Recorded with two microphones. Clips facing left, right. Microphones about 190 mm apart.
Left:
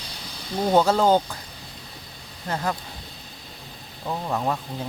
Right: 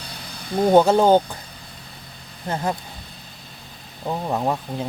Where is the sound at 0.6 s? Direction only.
20° right (ahead or behind).